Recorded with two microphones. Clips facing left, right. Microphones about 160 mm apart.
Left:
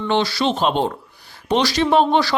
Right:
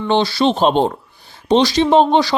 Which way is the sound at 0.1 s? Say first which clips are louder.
Right 4 dB; 25° right (ahead or behind).